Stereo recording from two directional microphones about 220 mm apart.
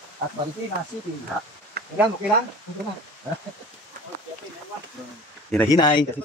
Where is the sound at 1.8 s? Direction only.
45° right (ahead or behind).